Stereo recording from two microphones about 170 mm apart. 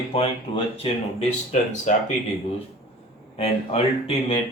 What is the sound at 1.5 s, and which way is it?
Speech, 45° left (ahead or behind).